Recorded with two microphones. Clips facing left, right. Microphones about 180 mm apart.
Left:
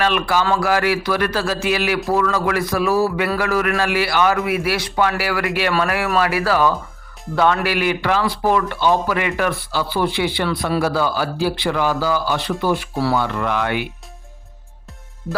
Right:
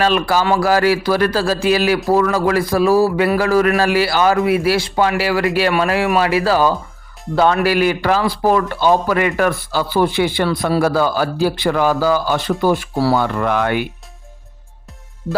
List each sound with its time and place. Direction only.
0.0 s a man's voice: 35° right (ahead or behind)